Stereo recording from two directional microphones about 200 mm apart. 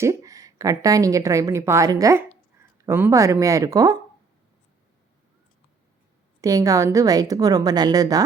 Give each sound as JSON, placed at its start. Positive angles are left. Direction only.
{"t": 0.0, "sound": "a woman's voice", "side_deg": -15}
{"t": 6.4, "sound": "a woman's voice", "side_deg": -15}